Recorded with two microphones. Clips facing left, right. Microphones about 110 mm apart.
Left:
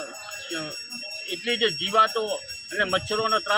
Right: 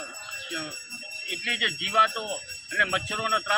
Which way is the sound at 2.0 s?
20° left (ahead or behind).